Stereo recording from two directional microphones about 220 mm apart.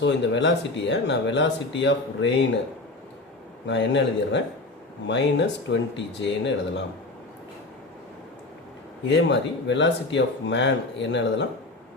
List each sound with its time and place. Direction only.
0.0 s speech: 55° left (ahead or behind)
3.7 s speech: 55° left (ahead or behind)
9.0 s speech: 55° left (ahead or behind)